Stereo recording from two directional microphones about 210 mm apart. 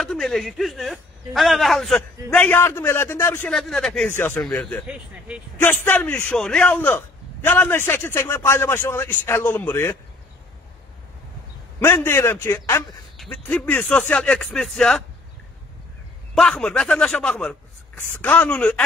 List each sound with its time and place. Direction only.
0.0 s a man's voice: centre (ahead or behind)
4.8 s a man's voice: 5° right (ahead or behind)
5.6 s a man's voice: 10° left (ahead or behind)
11.8 s a man's voice: 10° left (ahead or behind)
16.3 s a man's voice: 5° left (ahead or behind)